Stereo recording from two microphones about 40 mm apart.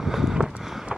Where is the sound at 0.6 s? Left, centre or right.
Centre.